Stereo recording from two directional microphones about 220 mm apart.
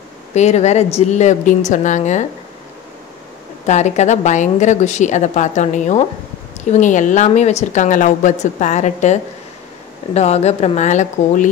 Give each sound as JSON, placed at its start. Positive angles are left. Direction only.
{"t": 0.3, "sound": "a woman's voice", "side_deg": 30}
{"t": 3.6, "sound": "a woman's voice", "side_deg": 30}